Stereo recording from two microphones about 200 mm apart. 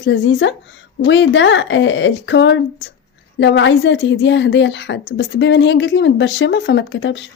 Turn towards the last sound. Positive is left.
turn(degrees=65)  # may be behind; listen again after turning